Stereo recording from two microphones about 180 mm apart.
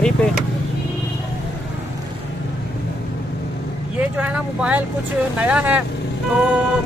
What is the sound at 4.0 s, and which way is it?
Speech, 10° right (ahead or behind).